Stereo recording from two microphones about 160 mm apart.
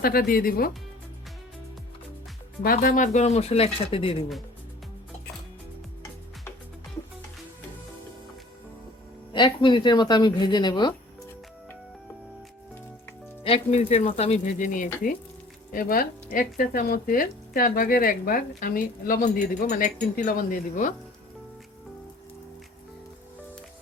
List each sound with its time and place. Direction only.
0.0 s speech: 70° left (ahead or behind)
2.6 s speech: 65° left (ahead or behind); by 4.3 s 35° left (ahead or behind)
9.3 s speech: 30° left (ahead or behind)
13.4 s speech: 40° left (ahead or behind)